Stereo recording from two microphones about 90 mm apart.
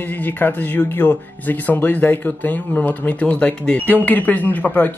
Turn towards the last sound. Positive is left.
turn(degrees=20)  # may be behind; listen again after turning